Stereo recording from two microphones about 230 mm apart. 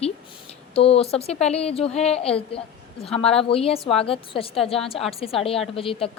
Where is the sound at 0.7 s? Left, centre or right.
Left.